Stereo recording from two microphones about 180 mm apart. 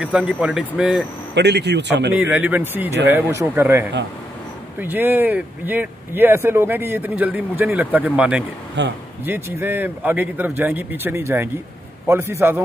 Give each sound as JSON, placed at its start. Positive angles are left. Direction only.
{"t": 0.0, "sound": "speech", "side_deg": -5}
{"t": 1.3, "sound": "speech", "side_deg": -70}
{"t": 2.1, "sound": "speech", "side_deg": -10}
{"t": 8.8, "sound": "speech", "side_deg": -75}
{"t": 9.2, "sound": "speech", "side_deg": -10}